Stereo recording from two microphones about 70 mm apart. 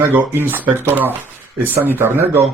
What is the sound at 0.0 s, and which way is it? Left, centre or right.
Speech, right.